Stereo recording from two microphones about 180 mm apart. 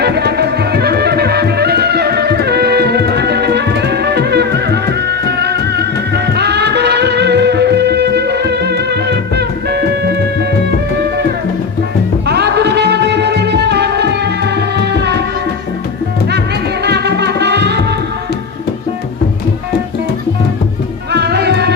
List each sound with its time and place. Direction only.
0.0 s music: 65° right (ahead or behind)
12.2 s music: 65° right (ahead or behind)
16.8 s music: 65° right (ahead or behind)
21.1 s music: 65° right (ahead or behind)